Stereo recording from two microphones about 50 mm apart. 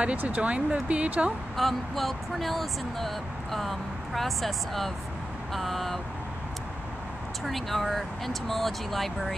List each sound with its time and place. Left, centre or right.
0.2 s speech: right
1.6 s speech: centre
7.4 s speech: centre